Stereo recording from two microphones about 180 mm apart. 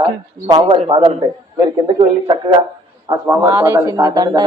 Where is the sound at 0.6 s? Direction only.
30° right (ahead or behind).